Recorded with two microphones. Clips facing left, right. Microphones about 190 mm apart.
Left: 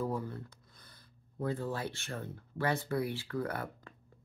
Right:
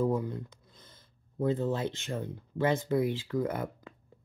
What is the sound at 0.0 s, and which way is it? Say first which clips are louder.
Speech: right 6 dB; 15° right (ahead or behind).